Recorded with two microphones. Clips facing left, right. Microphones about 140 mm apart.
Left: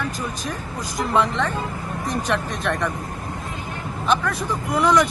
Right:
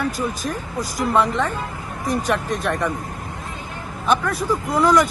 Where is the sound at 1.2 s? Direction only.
45° right (ahead or behind).